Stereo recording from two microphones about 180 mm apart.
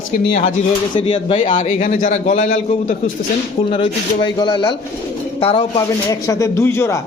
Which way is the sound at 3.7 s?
25° left (ahead or behind).